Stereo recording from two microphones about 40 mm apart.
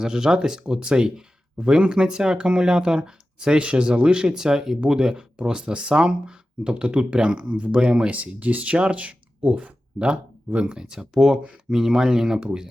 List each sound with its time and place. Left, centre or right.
0.0 s speech: centre
8.1 s speech: right
10.8 s speech: centre